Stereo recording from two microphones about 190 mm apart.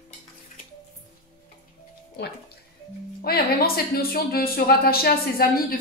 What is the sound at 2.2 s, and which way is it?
A woman's voice, 60° left (ahead or behind).